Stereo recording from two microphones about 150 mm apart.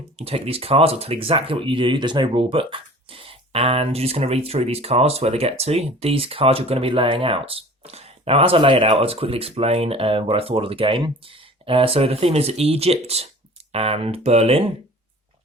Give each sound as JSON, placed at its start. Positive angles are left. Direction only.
{"t": 0.2, "sound": "speech", "side_deg": -40}